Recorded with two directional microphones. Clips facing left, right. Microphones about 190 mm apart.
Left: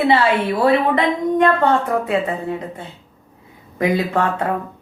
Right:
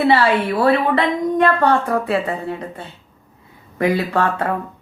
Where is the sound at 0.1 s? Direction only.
20° left (ahead or behind).